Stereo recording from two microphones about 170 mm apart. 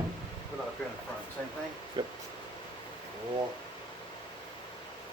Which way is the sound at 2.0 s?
30° right (ahead or behind).